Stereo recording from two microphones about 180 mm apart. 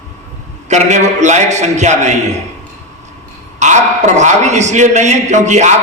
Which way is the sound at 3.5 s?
40° right (ahead or behind).